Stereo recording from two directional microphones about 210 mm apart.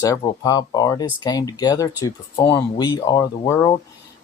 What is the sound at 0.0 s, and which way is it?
Speech, 15° left (ahead or behind).